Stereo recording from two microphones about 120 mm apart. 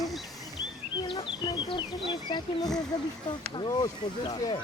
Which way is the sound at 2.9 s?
35° left (ahead or behind).